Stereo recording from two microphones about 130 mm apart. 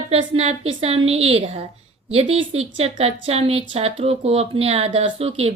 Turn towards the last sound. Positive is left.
turn(degrees=-50)  # may be behind; listen again after turning